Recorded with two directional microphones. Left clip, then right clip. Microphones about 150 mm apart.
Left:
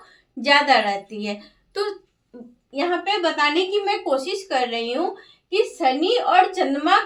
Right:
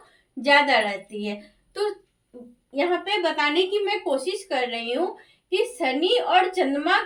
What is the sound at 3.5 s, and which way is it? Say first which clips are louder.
A woman's voice: left 2 dB; 30° left (ahead or behind).